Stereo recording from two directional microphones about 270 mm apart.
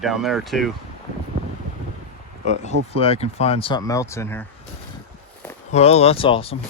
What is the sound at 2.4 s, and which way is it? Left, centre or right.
Speech, left.